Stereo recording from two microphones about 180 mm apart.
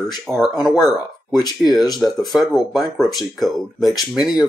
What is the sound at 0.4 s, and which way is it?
Speech, centre (ahead or behind).